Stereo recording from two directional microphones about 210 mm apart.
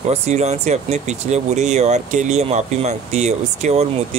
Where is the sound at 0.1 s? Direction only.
30° right (ahead or behind).